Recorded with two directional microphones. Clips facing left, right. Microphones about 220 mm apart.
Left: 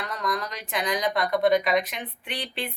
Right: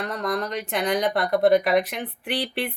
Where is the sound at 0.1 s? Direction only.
60° right (ahead or behind).